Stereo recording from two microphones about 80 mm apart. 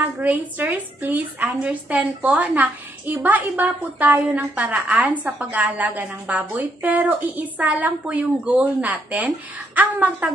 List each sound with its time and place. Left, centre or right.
0.2 s a woman's voice: right